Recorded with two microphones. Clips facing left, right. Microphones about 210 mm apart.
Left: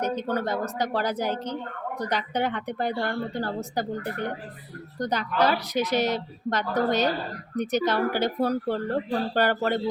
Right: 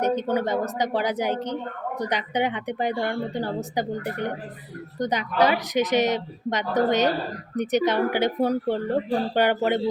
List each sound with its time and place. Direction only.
0.0 s speech: 20° right (ahead or behind)